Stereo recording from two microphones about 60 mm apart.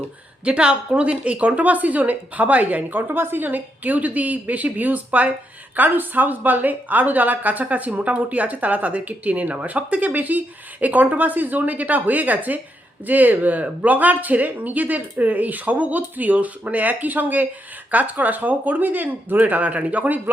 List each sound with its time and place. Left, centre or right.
0.4 s speech: centre